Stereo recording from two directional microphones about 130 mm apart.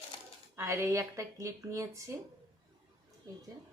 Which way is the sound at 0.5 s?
20° right (ahead or behind).